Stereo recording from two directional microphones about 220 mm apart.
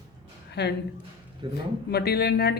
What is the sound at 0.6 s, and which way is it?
Speech, 50° left (ahead or behind).